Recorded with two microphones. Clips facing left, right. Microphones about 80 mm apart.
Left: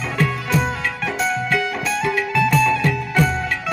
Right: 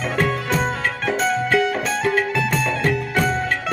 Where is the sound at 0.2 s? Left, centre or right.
Right.